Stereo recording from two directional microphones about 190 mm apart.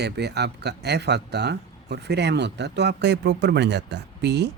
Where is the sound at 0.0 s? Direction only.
60° right (ahead or behind).